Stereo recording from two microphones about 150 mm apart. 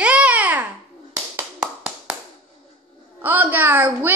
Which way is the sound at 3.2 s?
10° right (ahead or behind).